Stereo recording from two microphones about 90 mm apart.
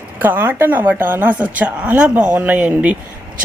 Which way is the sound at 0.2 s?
20° right (ahead or behind).